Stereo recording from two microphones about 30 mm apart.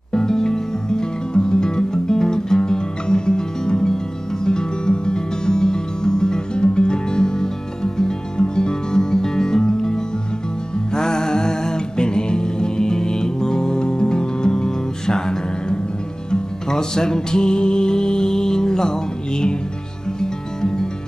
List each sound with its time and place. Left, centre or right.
0.1 s music: centre